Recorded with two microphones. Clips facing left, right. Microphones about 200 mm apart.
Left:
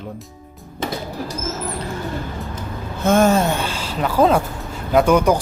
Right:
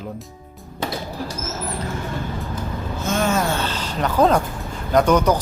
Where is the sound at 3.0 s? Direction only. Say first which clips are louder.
Left 8 dB; 55° left (ahead or behind).